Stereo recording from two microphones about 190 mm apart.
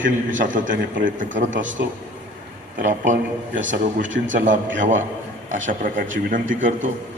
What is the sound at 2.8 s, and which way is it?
A man's voice, 40° right (ahead or behind).